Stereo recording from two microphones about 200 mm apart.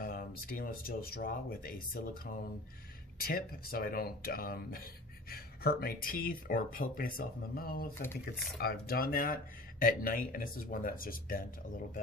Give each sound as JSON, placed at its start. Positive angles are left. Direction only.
{"t": 0.0, "sound": "speech", "side_deg": 45}